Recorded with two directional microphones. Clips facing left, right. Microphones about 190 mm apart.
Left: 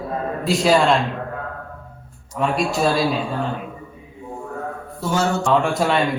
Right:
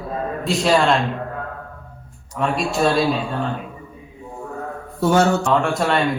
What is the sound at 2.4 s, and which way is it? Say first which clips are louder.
Speech: even; centre (ahead or behind).